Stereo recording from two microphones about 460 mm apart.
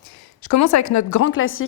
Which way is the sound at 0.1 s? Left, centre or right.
Left.